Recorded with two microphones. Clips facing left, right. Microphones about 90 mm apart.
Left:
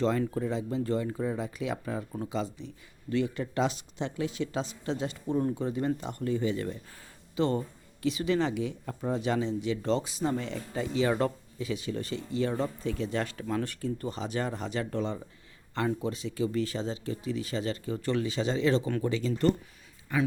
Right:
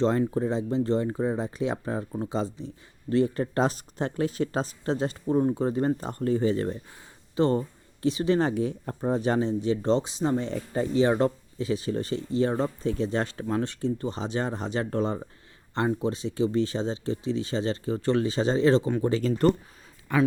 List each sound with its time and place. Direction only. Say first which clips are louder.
0.0 s speech: right 4 dB; 30° right (ahead or behind)
15.9 s speech: right 4 dB; 30° right (ahead or behind); by 19.5 s 45° right (ahead or behind)
20.1 s speech: right 5 dB; 60° right (ahead or behind)